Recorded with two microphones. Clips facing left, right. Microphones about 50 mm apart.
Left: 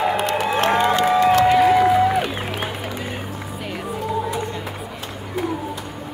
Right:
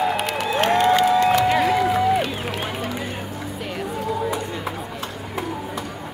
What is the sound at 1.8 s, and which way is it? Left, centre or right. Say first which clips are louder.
Music: left 3 dB; centre.